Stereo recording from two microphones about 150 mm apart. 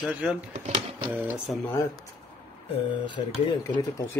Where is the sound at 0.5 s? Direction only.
50° right (ahead or behind).